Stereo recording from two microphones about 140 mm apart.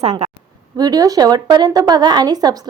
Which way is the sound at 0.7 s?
25° right (ahead or behind).